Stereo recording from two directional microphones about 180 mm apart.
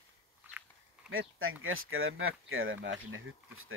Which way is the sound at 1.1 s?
90° right.